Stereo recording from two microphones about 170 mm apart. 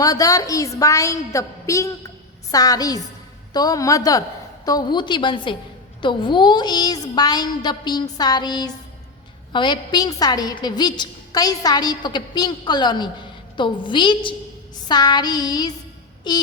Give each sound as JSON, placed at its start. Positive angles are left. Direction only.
{"t": 0.0, "sound": "a woman's voice", "side_deg": 20}